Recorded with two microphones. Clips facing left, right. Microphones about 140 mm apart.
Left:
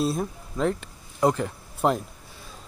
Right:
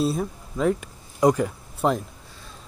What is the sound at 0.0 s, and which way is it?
Speech, centre (ahead or behind).